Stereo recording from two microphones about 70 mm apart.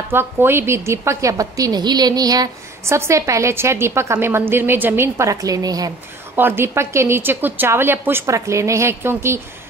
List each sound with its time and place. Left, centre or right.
0.1 s a woman's voice: right
2.8 s a woman's voice: right
5.3 s a woman's voice: right
6.3 s a woman's voice: right
8.3 s a woman's voice: right